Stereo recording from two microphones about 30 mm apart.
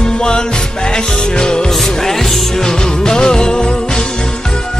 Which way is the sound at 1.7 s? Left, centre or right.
Centre.